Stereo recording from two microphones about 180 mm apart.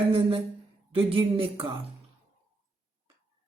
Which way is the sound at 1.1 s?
30° right (ahead or behind).